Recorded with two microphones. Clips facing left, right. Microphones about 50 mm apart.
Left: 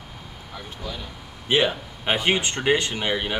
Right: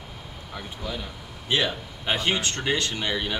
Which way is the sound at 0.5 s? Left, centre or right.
Centre.